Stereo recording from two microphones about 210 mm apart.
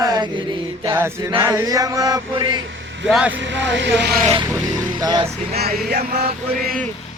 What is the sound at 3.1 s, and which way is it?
Speech, 5° right (ahead or behind).